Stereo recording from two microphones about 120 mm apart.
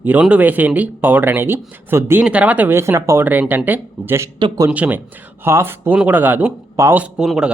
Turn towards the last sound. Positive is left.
turn(degrees=-5)  # may be behind; listen again after turning